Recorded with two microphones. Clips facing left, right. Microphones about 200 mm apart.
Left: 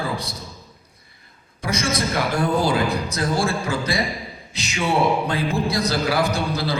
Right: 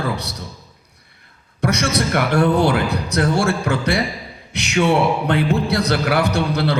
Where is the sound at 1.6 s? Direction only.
70° right (ahead or behind).